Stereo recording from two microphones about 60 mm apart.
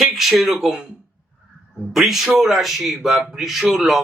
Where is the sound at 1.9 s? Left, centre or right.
Centre.